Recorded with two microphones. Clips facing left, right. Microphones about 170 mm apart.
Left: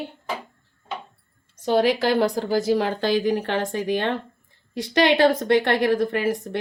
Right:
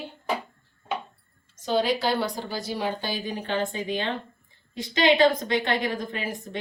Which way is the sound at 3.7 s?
70° left (ahead or behind).